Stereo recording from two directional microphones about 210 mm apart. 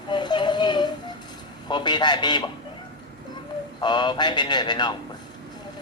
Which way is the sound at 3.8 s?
20° left (ahead or behind).